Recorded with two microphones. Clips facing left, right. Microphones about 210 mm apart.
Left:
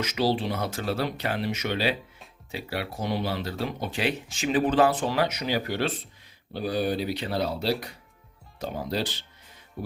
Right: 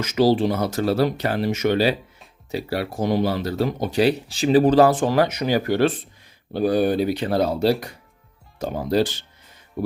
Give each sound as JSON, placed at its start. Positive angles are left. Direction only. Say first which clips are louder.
{"t": 0.0, "sound": "speech", "louder": "right 8 dB", "side_deg": -45}